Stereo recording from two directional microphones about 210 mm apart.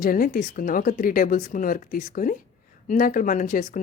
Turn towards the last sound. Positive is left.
turn(degrees=40)  # may be behind; listen again after turning